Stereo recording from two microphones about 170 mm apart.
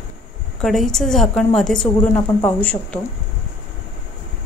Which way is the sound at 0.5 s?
Centre (ahead or behind).